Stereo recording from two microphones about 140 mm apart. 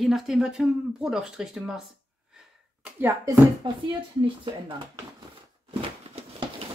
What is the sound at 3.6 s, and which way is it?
Speech, 35° right (ahead or behind).